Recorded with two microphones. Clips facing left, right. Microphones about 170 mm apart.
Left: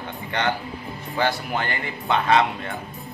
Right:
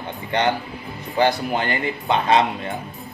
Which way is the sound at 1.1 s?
20° right (ahead or behind).